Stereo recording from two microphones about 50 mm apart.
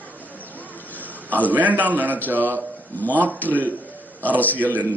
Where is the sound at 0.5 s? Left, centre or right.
Left.